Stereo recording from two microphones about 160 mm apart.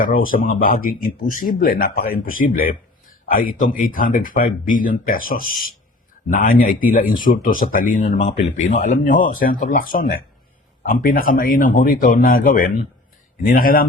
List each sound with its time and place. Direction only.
0.0 s speech: 60° left (ahead or behind)